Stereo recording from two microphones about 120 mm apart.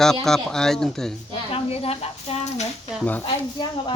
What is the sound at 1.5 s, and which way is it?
Speech, 55° left (ahead or behind).